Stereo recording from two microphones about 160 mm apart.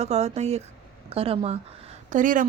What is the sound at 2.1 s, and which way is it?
Speech, 55° right (ahead or behind).